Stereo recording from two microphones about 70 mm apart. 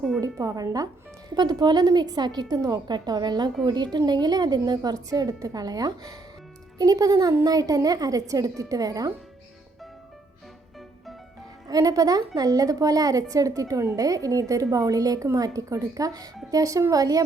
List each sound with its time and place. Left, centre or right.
0.2 s a woman's voice: right
1.3 s a woman's voice: right
2.6 s a woman's voice: right
3.9 s a woman's voice: right
11.7 s a woman's voice: right